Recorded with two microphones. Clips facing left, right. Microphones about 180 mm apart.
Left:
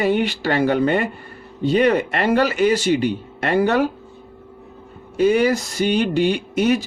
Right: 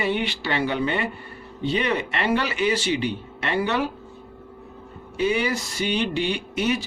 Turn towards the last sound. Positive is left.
turn(degrees=45)  # may be behind; listen again after turning